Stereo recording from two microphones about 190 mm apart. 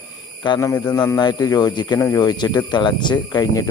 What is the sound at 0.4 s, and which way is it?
A man's voice, 20° left (ahead or behind).